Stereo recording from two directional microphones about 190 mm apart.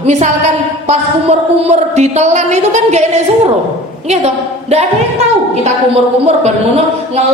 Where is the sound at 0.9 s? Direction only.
35° right (ahead or behind).